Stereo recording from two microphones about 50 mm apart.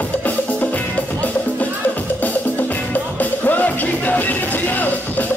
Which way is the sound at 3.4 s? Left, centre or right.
Left.